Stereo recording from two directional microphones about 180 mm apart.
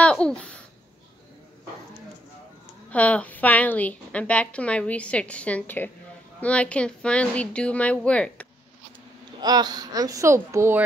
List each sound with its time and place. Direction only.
0.0 s babbling: 5° left (ahead or behind)
2.9 s a woman's voice: 10° left (ahead or behind)
9.4 s speech: 20° right (ahead or behind)